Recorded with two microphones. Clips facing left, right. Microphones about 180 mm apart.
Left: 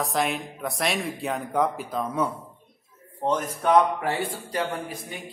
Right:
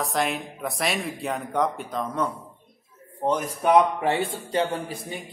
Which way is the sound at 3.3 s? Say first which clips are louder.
Right 1 dB; 10° right (ahead or behind).